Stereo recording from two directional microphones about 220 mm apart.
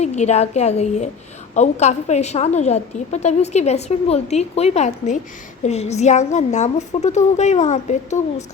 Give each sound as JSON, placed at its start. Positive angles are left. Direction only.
{"t": 0.0, "sound": "a woman's voice", "side_deg": 30}